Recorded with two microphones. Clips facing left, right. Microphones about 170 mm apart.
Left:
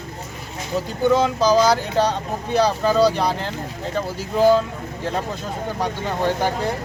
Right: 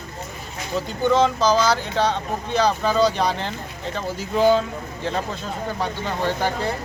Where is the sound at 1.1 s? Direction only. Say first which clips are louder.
Left 1 dB; 10° left (ahead or behind).